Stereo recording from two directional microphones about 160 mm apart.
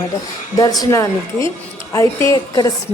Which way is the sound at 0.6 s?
20° left (ahead or behind).